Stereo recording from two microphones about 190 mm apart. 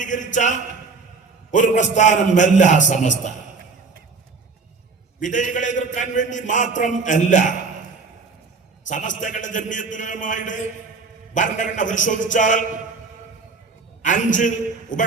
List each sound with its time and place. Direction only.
0.0 s a man's voice: 40° left (ahead or behind)
5.2 s a man's voice: 40° left (ahead or behind)
8.9 s a man's voice: 40° left (ahead or behind)
14.0 s a man's voice: 40° left (ahead or behind)